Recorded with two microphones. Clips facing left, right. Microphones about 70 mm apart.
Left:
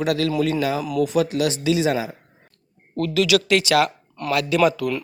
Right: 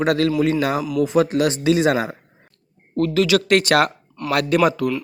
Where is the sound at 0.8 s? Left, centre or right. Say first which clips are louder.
Right 1 dB; centre.